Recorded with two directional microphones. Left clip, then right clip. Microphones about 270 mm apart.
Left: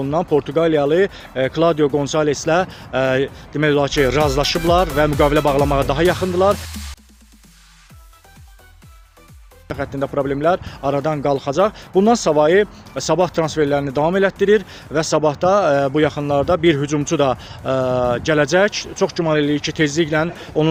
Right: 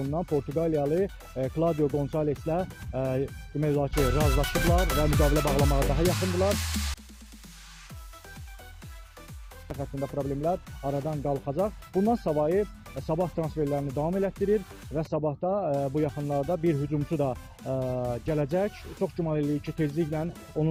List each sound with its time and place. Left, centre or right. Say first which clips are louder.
0.5 s speech: left 11 dB; centre
9.8 s speech: left 12 dB; left
11.9 s speech: left 12 dB; left
12.2 s speech: left 12 dB; centre